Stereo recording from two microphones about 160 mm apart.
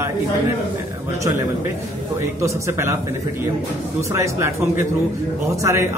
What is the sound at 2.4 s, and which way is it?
Speech, 20° right (ahead or behind).